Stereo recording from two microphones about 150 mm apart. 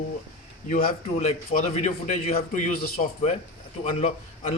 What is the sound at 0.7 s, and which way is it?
Speech, 80° left.